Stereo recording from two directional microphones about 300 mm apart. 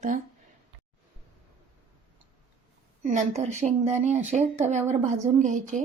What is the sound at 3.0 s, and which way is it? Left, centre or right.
Speech, right.